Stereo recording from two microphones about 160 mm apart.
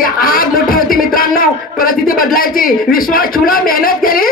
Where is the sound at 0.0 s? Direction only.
65° left (ahead or behind).